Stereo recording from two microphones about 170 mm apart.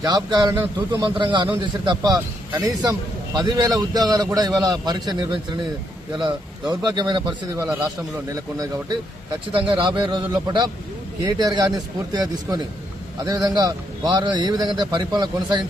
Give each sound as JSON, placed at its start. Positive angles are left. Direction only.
{"t": 0.0, "sound": "a man's voice", "side_deg": -25}